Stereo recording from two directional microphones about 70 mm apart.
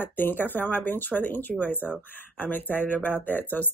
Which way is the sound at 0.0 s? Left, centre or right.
Left.